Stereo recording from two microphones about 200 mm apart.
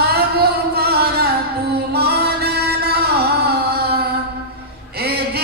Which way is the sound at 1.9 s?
55° right (ahead or behind).